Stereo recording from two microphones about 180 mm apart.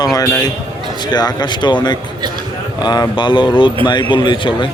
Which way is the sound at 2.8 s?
25° left (ahead or behind).